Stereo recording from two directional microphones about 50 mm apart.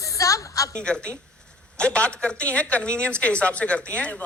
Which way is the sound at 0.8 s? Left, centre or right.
Centre.